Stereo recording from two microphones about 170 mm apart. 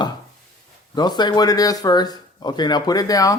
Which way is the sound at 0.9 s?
25° left (ahead or behind).